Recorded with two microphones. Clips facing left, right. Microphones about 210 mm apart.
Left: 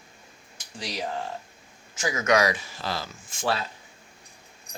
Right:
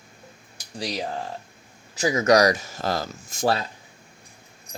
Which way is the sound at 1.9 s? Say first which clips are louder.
Right 5 dB; 35° right (ahead or behind).